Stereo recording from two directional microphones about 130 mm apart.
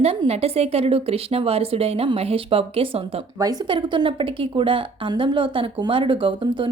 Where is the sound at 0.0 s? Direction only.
50° right (ahead or behind).